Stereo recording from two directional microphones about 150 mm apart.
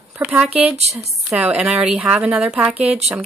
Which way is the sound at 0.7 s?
45° right (ahead or behind).